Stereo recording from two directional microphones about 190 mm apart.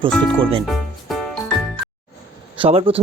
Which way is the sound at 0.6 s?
Centre (ahead or behind).